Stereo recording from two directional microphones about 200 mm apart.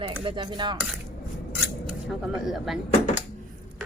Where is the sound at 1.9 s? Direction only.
5° right (ahead or behind).